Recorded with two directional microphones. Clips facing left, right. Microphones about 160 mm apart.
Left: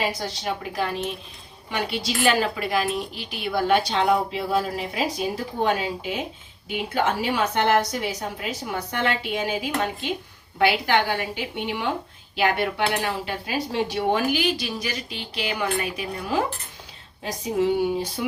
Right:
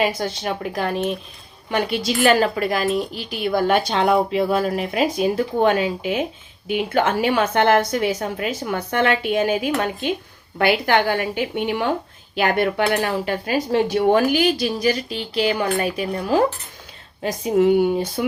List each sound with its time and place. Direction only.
0.4 s a woman's voice: 50° right (ahead or behind)
17.2 s a woman's voice: 55° right (ahead or behind)